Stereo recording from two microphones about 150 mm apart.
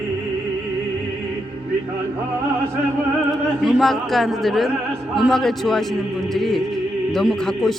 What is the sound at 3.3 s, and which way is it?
Speech, centre (ahead or behind).